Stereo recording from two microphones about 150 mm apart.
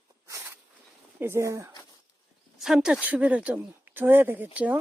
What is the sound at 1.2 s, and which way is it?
Speech, 15° right (ahead or behind).